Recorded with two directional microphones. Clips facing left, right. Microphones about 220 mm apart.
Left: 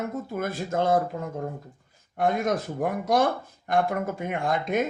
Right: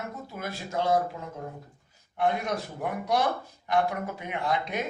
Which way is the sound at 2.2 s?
45° left (ahead or behind).